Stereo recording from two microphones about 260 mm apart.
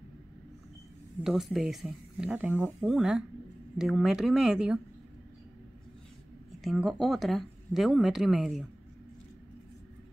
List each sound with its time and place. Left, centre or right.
1.2 s speech: centre
6.6 s speech: centre